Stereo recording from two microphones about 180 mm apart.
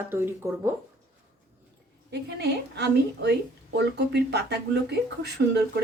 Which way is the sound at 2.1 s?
65° right (ahead or behind).